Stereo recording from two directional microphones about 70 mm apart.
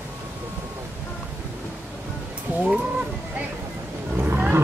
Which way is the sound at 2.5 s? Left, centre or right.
Centre.